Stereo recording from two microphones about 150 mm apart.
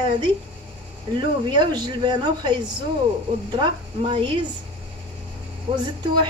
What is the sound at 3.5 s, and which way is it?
Speech, 35° right (ahead or behind).